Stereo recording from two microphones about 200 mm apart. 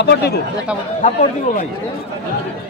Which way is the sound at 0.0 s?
55° left (ahead or behind).